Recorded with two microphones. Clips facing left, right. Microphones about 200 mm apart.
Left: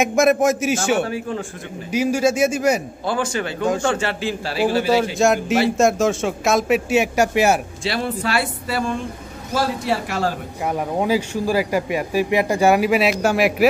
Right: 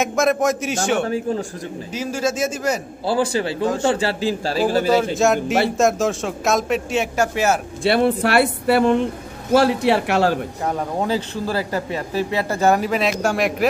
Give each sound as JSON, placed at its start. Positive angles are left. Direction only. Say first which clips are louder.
{"t": 0.0, "sound": "a man's voice", "louder": "left 2 dB", "side_deg": 10}
{"t": 1.9, "sound": "a man's voice", "louder": "left 5 dB", "side_deg": 15}
{"t": 3.1, "sound": "a man's voice", "louder": "right 3 dB", "side_deg": -35}
{"t": 4.9, "sound": "speech", "louder": "even", "side_deg": 0}
{"t": 7.8, "sound": "speech", "louder": "right 6 dB", "side_deg": -55}
{"t": 10.6, "sound": "a man's voice", "louder": "left 6 dB", "side_deg": 10}